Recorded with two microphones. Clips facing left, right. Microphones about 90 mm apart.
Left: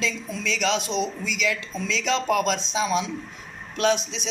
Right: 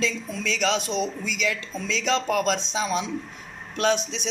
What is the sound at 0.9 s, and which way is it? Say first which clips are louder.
Speech: left 1 dB; 40° right (ahead or behind).